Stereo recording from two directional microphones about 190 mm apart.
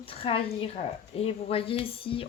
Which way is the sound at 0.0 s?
30° left (ahead or behind).